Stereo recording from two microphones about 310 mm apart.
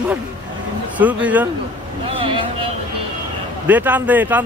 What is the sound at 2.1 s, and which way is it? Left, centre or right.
Speech, centre.